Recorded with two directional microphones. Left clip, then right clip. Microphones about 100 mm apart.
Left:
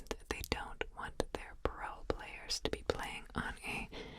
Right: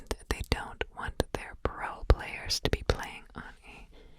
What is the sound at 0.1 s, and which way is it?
Whispering, 55° right (ahead or behind).